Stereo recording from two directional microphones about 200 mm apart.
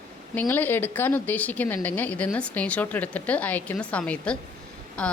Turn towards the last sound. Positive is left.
turn(degrees=5)  # may be behind; listen again after turning